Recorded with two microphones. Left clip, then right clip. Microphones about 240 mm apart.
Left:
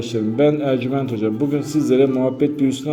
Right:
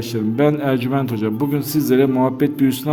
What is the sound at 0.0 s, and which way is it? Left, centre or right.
A man's voice, right.